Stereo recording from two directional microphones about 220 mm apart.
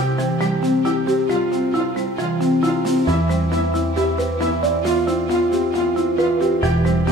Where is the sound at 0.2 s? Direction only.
Centre (ahead or behind).